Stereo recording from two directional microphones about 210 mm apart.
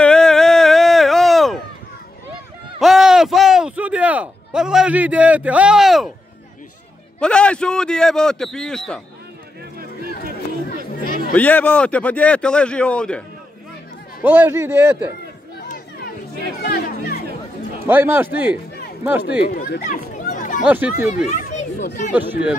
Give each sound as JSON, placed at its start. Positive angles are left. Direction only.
{"t": 0.0, "sound": "a sound", "side_deg": 5}
{"t": 2.8, "sound": "speech", "side_deg": 0}
{"t": 7.2, "sound": "speech", "side_deg": 5}
{"t": 11.3, "sound": "speech", "side_deg": 10}
{"t": 14.2, "sound": "a man's voice", "side_deg": -10}
{"t": 16.6, "sound": "speech", "side_deg": 45}
{"t": 17.8, "sound": "a man's voice", "side_deg": -10}
{"t": 19.5, "sound": "chatter", "side_deg": 45}
{"t": 20.6, "sound": "a man's voice", "side_deg": -10}
{"t": 20.9, "sound": "chatter", "side_deg": 40}
{"t": 22.1, "sound": "a man's voice", "side_deg": -10}